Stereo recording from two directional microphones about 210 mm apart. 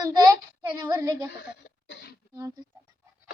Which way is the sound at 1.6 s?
50° left (ahead or behind).